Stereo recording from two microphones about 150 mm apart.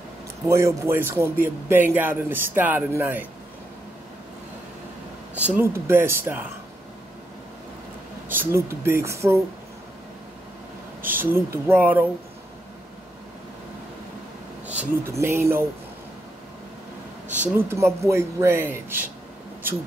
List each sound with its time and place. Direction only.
0.5 s a man's voice: 20° right (ahead or behind)
5.3 s a man's voice: 10° right (ahead or behind)
8.3 s a man's voice: 15° right (ahead or behind)
11.0 s a man's voice: 15° right (ahead or behind)
14.7 s speech: 15° right (ahead or behind)
17.6 s a man's voice: 15° right (ahead or behind)